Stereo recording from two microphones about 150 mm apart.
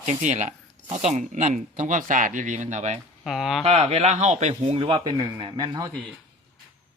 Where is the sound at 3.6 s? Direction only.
45° right (ahead or behind); by 5.9 s 30° right (ahead or behind).